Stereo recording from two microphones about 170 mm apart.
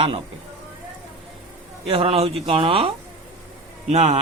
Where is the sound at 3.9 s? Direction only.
45° right (ahead or behind).